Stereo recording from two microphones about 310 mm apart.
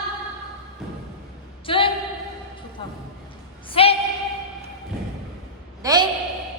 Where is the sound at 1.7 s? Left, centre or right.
Centre.